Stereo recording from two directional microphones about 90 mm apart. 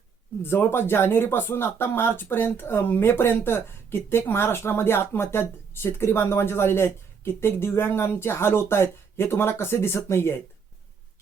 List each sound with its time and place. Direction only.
0.4 s speech: 25° left (ahead or behind)